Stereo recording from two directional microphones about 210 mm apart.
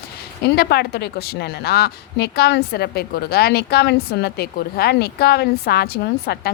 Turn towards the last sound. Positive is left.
turn(degrees=50)  # may be behind; listen again after turning